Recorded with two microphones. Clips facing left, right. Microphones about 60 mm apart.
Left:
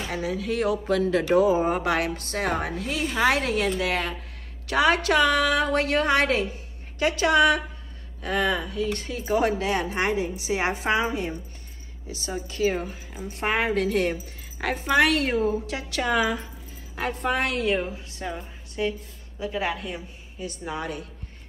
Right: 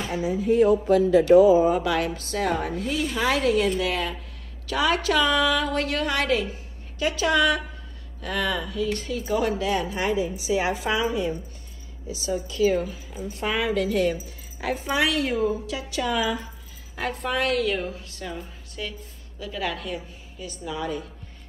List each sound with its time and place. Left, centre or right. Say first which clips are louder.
0.1 s a woman's voice: right 6 dB; left
17.0 s a woman's voice: even; left
20.6 s speech: right 3 dB; left